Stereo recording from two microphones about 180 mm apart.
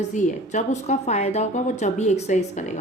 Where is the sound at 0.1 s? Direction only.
40° left (ahead or behind).